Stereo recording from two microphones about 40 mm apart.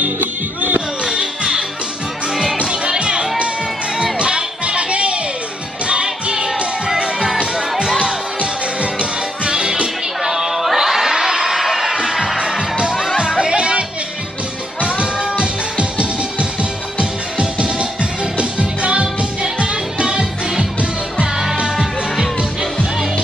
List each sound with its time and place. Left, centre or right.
0.0 s music: right
1.0 s music: right
2.6 s music: right
8.4 s music: right
10.3 s a sound: centre
11.1 s music: centre
21.6 s music: centre